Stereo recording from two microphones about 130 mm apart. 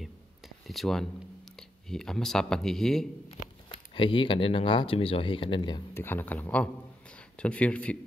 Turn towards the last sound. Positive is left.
turn(degrees=10)  # may be behind; listen again after turning